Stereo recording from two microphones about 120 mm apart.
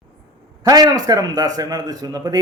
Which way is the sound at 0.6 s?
30° right (ahead or behind).